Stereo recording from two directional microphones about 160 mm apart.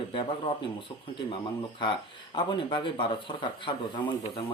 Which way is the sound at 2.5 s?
30° left (ahead or behind).